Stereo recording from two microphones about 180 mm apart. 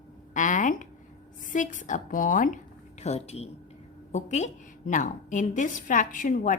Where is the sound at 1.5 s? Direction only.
45° left (ahead or behind).